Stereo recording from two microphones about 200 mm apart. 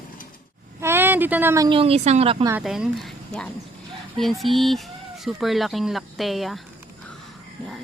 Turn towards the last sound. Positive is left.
turn(degrees=0)  # may be behind; listen again after turning